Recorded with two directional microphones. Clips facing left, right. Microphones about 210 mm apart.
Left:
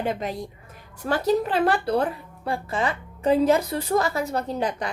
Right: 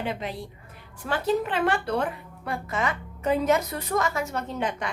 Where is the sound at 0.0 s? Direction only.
45° left (ahead or behind).